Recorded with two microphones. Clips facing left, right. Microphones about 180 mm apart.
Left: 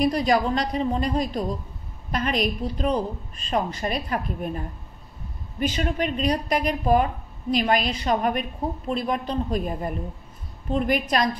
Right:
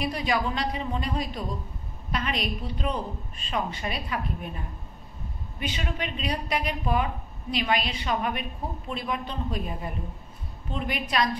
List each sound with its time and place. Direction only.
0.0 s a woman's voice: 40° left (ahead or behind)
5.6 s a woman's voice: 45° left (ahead or behind)